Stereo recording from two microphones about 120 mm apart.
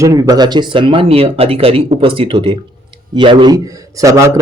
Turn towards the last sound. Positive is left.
turn(degrees=-25)  # may be behind; listen again after turning